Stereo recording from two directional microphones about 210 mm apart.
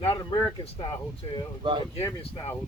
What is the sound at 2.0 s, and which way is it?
Speech, 25° left (ahead or behind).